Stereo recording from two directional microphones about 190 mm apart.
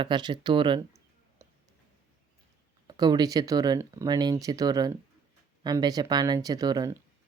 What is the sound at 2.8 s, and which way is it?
Speech, 20° right (ahead or behind).